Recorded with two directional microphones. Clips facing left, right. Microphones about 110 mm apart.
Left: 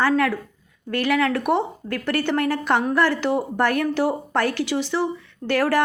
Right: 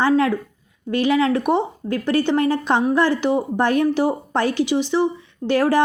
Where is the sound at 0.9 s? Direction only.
20° right (ahead or behind).